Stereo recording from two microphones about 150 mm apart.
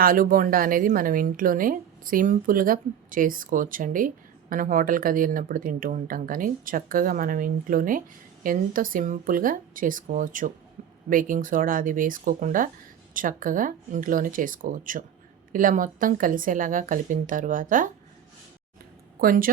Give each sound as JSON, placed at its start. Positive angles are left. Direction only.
{"t": 0.0, "sound": "a woman's voice", "side_deg": -70}
{"t": 19.2, "sound": "a woman's voice", "side_deg": -70}